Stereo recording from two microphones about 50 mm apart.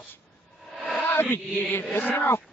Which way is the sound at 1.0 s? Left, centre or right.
Left.